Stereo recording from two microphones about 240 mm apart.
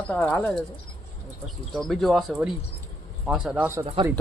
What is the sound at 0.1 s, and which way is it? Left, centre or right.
Speech, centre.